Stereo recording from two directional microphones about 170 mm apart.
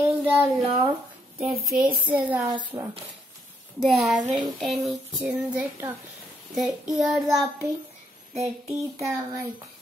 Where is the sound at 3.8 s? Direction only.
Centre (ahead or behind).